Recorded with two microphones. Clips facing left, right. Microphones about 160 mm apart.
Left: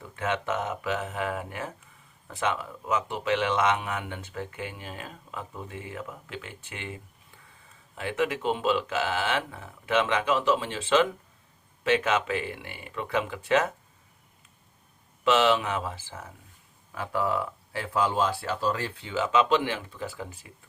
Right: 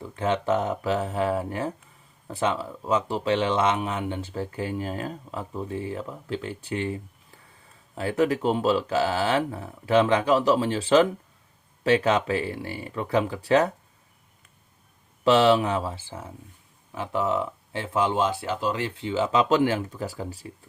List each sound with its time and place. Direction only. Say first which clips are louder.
0.0 s speech: right 4 dB; 30° right (ahead or behind)
15.2 s speech: right 4 dB; 35° right (ahead or behind)